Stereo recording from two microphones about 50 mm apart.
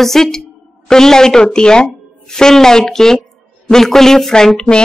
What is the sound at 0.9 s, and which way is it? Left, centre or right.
A woman's voice, centre.